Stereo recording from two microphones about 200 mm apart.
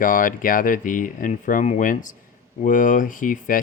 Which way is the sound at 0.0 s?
40° left (ahead or behind).